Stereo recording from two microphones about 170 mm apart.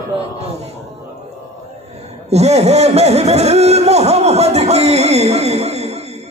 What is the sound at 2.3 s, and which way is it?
A man's voice, 40° right (ahead or behind).